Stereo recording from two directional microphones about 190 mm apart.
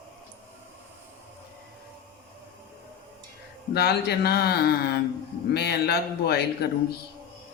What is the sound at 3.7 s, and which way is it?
Speech, 60° left (ahead or behind).